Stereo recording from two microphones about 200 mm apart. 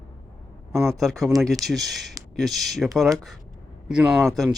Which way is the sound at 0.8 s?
Centre (ahead or behind).